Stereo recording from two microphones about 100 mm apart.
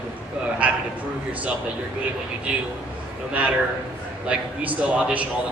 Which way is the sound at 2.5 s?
10° right (ahead or behind).